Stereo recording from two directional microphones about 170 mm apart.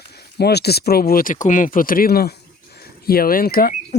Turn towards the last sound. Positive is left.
turn(degrees=65)  # may be behind; listen again after turning